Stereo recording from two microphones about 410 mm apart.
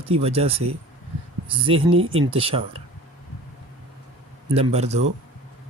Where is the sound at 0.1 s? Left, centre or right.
Centre.